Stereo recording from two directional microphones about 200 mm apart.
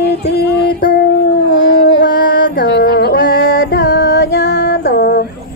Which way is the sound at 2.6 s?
60° left (ahead or behind).